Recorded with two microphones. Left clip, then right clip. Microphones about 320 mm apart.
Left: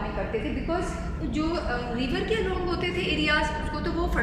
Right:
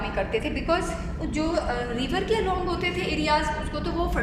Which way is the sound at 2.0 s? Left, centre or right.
Centre.